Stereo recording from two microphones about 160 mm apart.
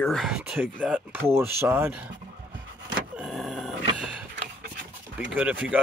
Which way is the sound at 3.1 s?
Centre (ahead or behind).